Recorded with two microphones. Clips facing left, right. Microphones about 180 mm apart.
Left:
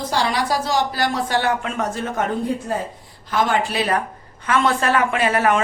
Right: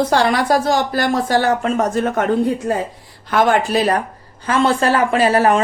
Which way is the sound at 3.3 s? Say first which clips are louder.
Right 5 dB; 55° right (ahead or behind).